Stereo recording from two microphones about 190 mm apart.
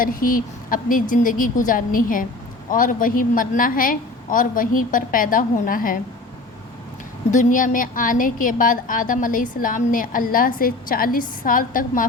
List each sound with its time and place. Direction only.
0.0 s a woman's voice: 45° left (ahead or behind)
7.3 s a woman's voice: 40° left (ahead or behind)